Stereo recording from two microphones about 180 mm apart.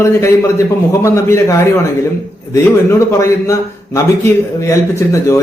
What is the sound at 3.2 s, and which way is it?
Speech, 15° left (ahead or behind).